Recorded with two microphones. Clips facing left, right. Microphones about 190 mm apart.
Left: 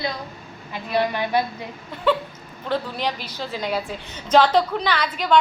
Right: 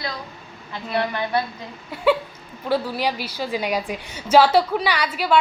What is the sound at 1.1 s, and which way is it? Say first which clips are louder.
Speech: left 1 dB; 15° left (ahead or behind).